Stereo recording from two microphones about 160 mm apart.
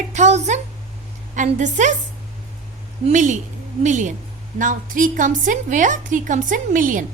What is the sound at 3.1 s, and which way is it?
A woman's voice, 50° right (ahead or behind).